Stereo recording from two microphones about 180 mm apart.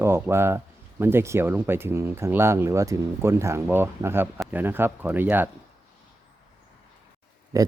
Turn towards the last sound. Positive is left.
turn(degrees=-20)  # may be behind; listen again after turning